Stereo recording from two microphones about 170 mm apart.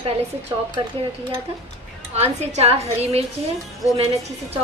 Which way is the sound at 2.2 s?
40° right (ahead or behind).